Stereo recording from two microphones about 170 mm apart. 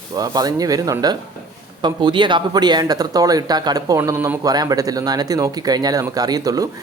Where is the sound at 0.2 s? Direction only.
20° right (ahead or behind).